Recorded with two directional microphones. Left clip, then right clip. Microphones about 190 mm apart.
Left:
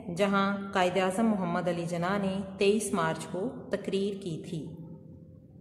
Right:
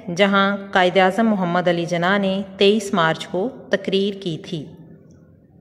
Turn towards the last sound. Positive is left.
turn(degrees=-25)  # may be behind; listen again after turning